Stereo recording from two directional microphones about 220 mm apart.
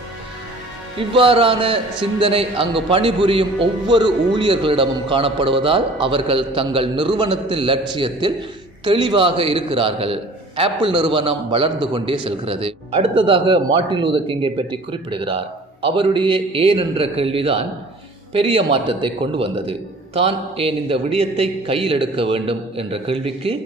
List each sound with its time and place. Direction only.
0.9 s a man's voice: 25° right (ahead or behind)